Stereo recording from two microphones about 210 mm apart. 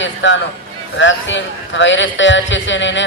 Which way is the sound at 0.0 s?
60° left (ahead or behind).